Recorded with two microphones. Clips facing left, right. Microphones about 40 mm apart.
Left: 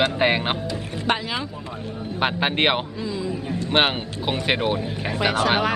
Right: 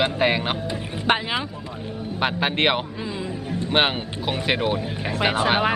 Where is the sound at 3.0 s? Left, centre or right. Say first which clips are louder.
Left 2 dB; right.